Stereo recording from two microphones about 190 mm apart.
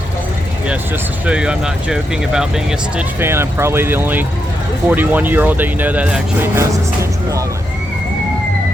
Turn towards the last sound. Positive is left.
turn(degrees=-15)  # may be behind; listen again after turning